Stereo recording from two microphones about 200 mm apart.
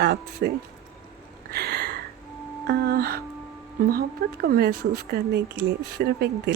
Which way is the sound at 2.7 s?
50° right (ahead or behind).